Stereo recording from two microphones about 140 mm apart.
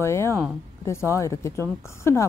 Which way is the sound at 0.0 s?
20° left (ahead or behind).